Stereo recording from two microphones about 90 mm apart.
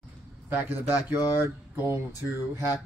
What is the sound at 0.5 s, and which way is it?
Speech, 20° right (ahead or behind).